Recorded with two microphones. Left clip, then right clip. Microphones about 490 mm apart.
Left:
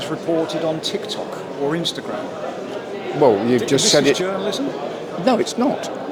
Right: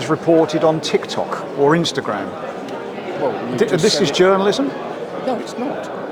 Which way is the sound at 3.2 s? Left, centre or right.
Left.